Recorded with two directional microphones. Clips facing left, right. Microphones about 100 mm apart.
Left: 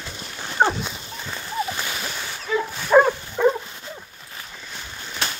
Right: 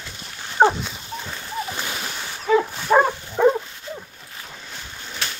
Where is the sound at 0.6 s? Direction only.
40° right (ahead or behind).